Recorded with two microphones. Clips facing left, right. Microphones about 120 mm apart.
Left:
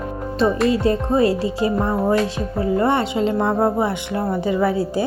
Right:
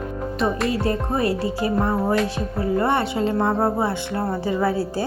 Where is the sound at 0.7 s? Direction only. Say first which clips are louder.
Left 5 dB; 25° left (ahead or behind).